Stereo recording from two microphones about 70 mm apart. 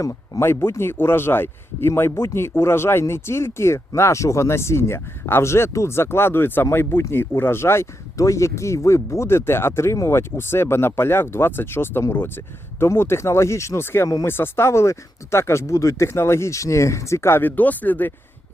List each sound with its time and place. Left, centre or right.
0.0 s speech: left